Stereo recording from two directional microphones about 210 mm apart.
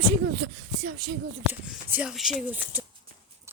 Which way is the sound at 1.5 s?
10° right (ahead or behind).